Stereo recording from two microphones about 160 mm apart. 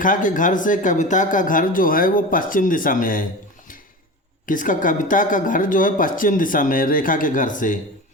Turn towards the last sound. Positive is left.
turn(degrees=55)  # may be behind; listen again after turning